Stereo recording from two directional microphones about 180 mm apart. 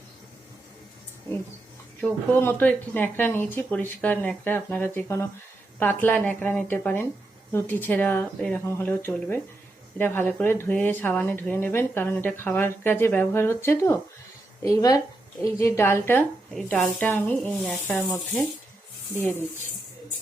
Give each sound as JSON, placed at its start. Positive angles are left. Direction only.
{"t": 2.0, "sound": "speech", "side_deg": 10}